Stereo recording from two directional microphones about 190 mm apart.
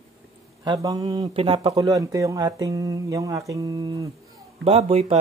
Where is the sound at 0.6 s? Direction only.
20° right (ahead or behind).